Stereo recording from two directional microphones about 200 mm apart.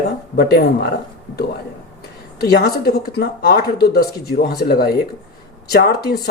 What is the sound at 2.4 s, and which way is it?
Speech, 50° left (ahead or behind).